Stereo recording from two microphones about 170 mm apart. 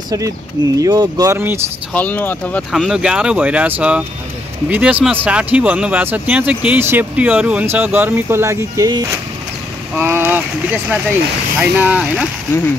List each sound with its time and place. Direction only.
0.7 s speech: 25° right (ahead or behind)
2.0 s speech: 10° left (ahead or behind)
2.7 s speech: 5° right (ahead or behind)